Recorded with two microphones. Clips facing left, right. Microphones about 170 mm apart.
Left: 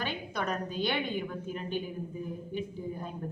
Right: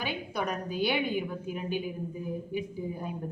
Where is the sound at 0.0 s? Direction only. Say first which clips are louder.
Right 1 dB; 10° right (ahead or behind).